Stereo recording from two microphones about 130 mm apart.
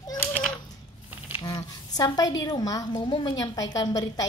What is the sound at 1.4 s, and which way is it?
A woman's voice, 30° left (ahead or behind).